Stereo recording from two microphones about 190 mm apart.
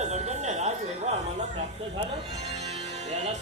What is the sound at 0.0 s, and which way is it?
Music, 35° right (ahead or behind).